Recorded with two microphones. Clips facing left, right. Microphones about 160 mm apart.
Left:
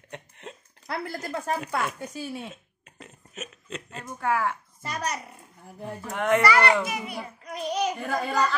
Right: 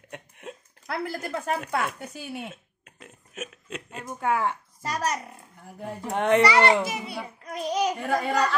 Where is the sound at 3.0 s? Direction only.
5° right (ahead or behind).